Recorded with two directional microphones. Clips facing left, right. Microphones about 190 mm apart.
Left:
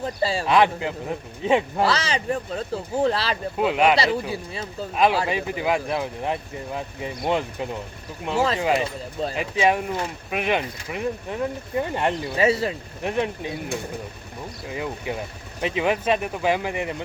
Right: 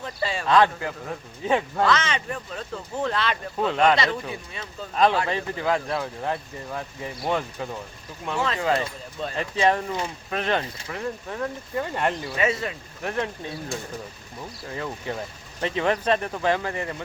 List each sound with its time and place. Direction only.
0.0 s speech: 35° left (ahead or behind)
0.4 s a man's voice: 15° left (ahead or behind)
1.8 s speech: 35° left (ahead or behind)
3.6 s speech: 10° left (ahead or behind)
4.9 s speech: 10° left (ahead or behind)
12.4 s speech: 30° left (ahead or behind)
13.0 s a man's voice: 20° left (ahead or behind)
14.7 s speech: 15° left (ahead or behind)